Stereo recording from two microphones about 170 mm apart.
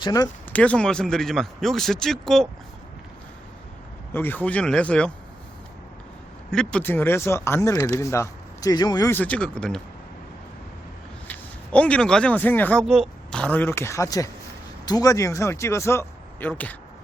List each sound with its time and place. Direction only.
0.0 s speech: 20° left (ahead or behind)
0.5 s speech: 5° left (ahead or behind)
4.1 s speech: 10° left (ahead or behind)
6.5 s speech: 5° left (ahead or behind)
11.3 s speech: 5° left (ahead or behind)
12.8 s speech: centre (ahead or behind)